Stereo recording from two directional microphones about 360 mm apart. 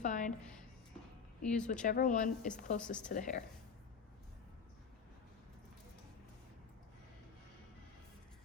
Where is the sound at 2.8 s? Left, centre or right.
Centre.